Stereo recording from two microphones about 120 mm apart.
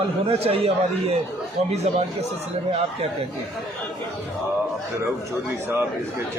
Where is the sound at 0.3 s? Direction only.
55° right (ahead or behind).